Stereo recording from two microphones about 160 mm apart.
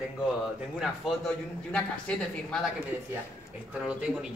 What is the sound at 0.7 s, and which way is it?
Speech, centre (ahead or behind).